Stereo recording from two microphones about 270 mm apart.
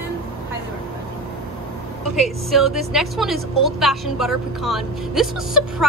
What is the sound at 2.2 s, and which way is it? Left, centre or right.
A woman's voice, centre.